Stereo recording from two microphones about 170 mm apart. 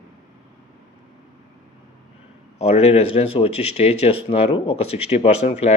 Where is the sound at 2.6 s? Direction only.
40° left (ahead or behind).